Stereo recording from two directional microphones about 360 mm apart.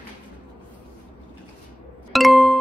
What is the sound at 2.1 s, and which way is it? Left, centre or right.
Music, centre.